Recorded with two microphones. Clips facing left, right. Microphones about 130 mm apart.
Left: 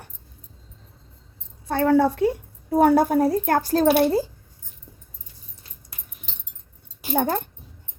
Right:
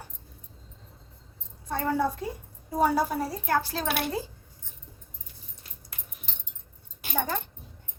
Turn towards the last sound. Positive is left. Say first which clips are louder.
# left 8 dB
turn(degrees=55)  # may be behind; listen again after turning